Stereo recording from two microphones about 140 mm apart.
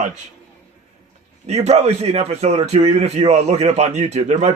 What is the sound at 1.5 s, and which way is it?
Speech, 50° right (ahead or behind).